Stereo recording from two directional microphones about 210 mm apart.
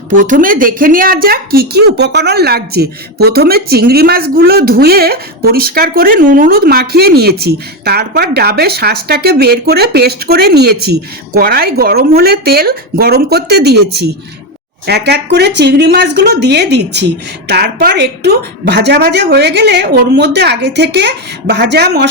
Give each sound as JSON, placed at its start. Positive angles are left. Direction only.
{"t": 0.2, "sound": "a woman's voice", "side_deg": -40}